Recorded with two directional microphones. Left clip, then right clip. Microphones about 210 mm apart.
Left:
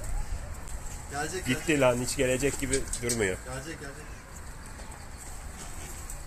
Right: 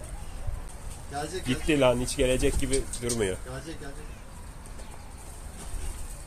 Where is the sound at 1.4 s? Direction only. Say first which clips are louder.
Right 1 dB; 15° right (ahead or behind).